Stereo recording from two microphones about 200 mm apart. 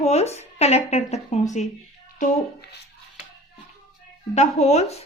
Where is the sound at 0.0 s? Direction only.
30° left (ahead or behind).